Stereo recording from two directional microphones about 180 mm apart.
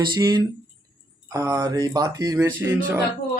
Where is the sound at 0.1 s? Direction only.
20° right (ahead or behind).